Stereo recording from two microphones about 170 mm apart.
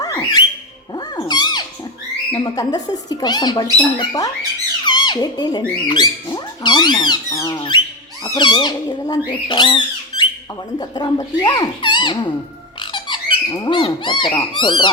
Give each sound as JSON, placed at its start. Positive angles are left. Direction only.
{"t": 0.0, "sound": "bird", "side_deg": 25}
{"t": 0.9, "sound": "cat", "side_deg": 25}
{"t": 2.3, "sound": "speech", "side_deg": 25}
{"t": 12.8, "sound": "squeak", "side_deg": 25}
{"t": 13.5, "sound": "speech", "side_deg": 25}